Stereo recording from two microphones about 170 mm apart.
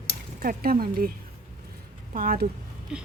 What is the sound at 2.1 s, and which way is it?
Speech, 55° right (ahead or behind).